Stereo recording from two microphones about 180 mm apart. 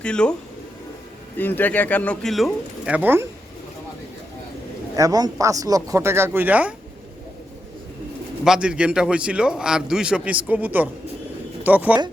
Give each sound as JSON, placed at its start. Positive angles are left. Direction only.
{"t": 0.0, "sound": "a man's voice", "side_deg": 5}
{"t": 1.4, "sound": "speech", "side_deg": 10}
{"t": 4.9, "sound": "speech", "side_deg": -20}
{"t": 8.4, "sound": "a man's voice", "side_deg": -5}